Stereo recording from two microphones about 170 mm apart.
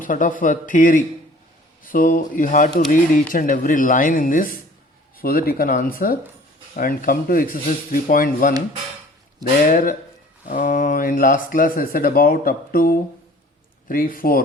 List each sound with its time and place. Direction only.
0.0 s speech: 50° left (ahead or behind)
9.6 s speech: 50° left (ahead or behind)